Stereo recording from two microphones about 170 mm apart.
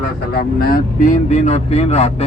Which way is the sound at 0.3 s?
60° left (ahead or behind).